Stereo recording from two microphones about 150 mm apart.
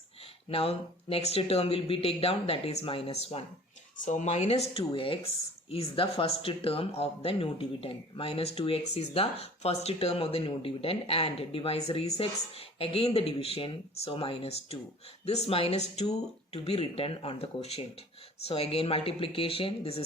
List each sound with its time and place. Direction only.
0.5 s speech: 40° left (ahead or behind)
4.0 s speech: 55° left (ahead or behind)